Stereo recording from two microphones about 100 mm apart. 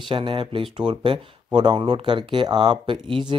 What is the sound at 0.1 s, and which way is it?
Speech, 55° right (ahead or behind).